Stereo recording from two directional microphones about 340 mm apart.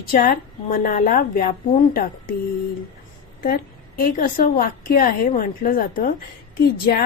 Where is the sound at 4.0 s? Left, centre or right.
Left.